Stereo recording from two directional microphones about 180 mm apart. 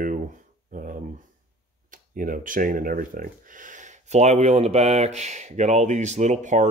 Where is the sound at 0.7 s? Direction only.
45° right (ahead or behind).